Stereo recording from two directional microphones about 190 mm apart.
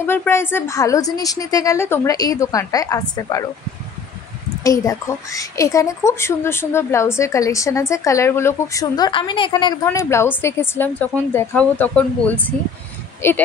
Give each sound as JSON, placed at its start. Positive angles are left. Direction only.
{"t": 0.0, "sound": "a woman's voice", "side_deg": 10}
{"t": 4.6, "sound": "a woman's voice", "side_deg": 15}